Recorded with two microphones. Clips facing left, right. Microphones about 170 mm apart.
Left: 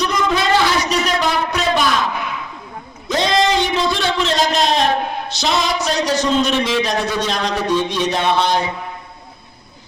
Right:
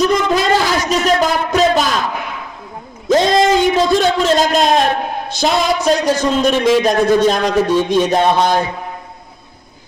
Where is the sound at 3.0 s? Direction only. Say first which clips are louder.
Right 5 dB; 45° right (ahead or behind).